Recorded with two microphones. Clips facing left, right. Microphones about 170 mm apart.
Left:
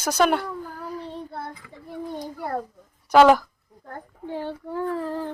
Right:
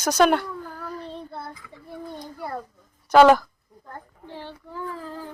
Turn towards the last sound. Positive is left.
turn(degrees=65)  # may be behind; listen again after turning